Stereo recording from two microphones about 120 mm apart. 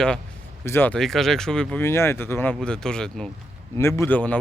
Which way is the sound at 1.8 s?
20° left (ahead or behind).